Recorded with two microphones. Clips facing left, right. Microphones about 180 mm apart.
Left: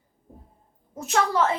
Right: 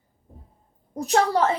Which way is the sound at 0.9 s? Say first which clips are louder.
Right 3 dB; 35° right (ahead or behind).